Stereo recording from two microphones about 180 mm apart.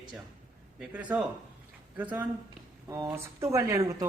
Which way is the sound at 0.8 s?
5° right (ahead or behind).